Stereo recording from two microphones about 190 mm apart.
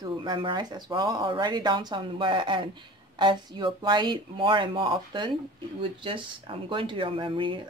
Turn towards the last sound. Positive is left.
turn(degrees=-25)  # may be behind; listen again after turning